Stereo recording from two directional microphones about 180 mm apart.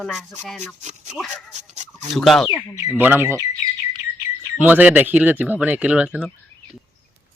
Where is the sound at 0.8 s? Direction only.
40° right (ahead or behind).